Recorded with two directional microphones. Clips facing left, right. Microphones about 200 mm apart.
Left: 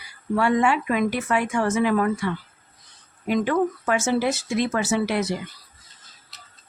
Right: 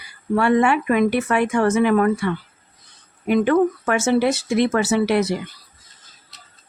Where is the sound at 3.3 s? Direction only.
60° right (ahead or behind).